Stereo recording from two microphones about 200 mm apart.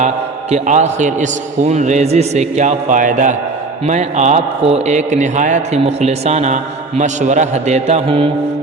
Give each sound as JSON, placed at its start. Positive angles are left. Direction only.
{"t": 0.5, "sound": "a man's voice", "side_deg": -35}